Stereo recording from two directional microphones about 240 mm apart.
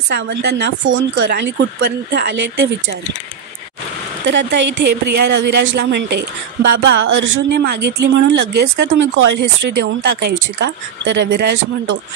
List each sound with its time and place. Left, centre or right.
0.1 s speech: right
4.3 s speech: right